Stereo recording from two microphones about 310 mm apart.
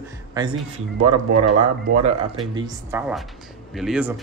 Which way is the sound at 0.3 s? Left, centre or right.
Centre.